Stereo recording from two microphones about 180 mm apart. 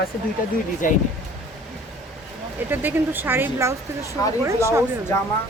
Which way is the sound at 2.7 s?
10° right (ahead or behind).